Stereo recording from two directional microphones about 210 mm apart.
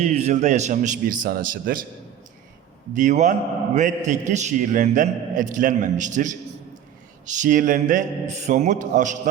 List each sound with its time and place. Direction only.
0.0 s a man's voice: 30° right (ahead or behind)
2.9 s a man's voice: 35° right (ahead or behind)